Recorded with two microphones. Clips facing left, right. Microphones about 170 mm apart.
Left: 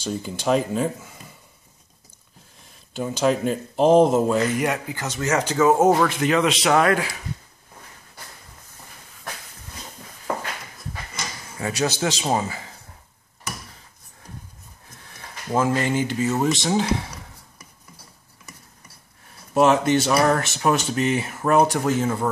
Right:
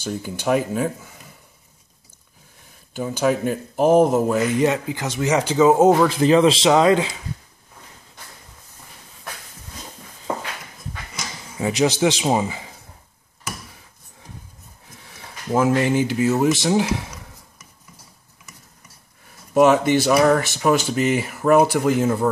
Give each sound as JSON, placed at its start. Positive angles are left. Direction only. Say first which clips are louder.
{"t": 0.1, "sound": "speech", "louder": "right 1 dB", "side_deg": -5}
{"t": 3.0, "sound": "speech", "louder": "right 1 dB", "side_deg": 0}
{"t": 4.6, "sound": "speech", "louder": "right 5 dB", "side_deg": -20}
{"t": 6.0, "sound": "speech", "louder": "right 5 dB", "side_deg": -30}
{"t": 11.5, "sound": "speech", "louder": "right 5 dB", "side_deg": -15}
{"t": 15.5, "sound": "speech", "louder": "right 3 dB", "side_deg": -10}
{"t": 19.6, "sound": "speech", "louder": "right 2 dB", "side_deg": -5}